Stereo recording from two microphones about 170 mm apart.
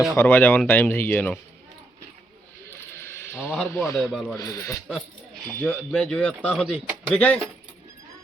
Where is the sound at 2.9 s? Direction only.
15° left (ahead or behind).